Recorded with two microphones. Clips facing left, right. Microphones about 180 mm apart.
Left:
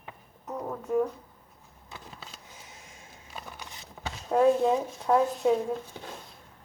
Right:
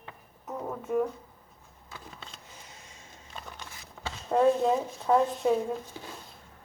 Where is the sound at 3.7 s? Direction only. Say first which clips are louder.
Left 1 dB; 20° left (ahead or behind).